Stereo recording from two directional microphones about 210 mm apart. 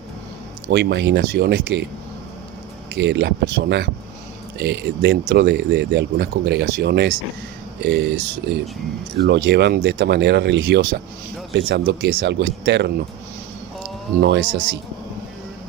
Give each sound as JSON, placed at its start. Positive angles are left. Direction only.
{"t": 0.7, "sound": "speech", "side_deg": -55}
{"t": 2.9, "sound": "speech", "side_deg": -55}
{"t": 9.1, "sound": "speech", "side_deg": -50}
{"t": 14.2, "sound": "speech", "side_deg": -50}